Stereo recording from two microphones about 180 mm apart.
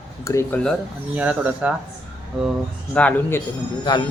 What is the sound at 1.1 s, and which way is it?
Speech, 10° right (ahead or behind).